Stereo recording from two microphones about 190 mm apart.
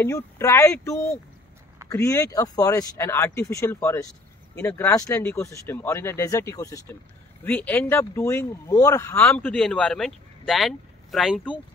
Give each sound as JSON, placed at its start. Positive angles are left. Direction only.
{"t": 0.0, "sound": "speech", "side_deg": 15}